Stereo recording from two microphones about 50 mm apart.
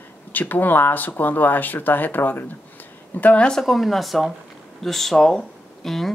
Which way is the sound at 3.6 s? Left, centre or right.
Centre.